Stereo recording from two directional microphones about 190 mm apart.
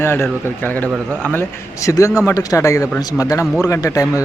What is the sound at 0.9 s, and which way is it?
Speech, 5° right (ahead or behind).